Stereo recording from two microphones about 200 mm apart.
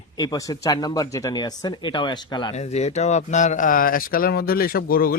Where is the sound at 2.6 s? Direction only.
35° left (ahead or behind).